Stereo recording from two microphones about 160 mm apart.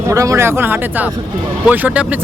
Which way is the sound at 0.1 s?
20° right (ahead or behind).